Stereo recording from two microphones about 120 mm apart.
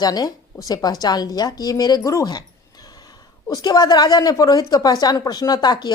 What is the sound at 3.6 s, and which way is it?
A woman's voice, 35° left (ahead or behind).